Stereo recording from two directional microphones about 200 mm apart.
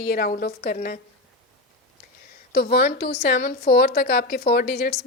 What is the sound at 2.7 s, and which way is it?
A woman's voice, 50° left (ahead or behind).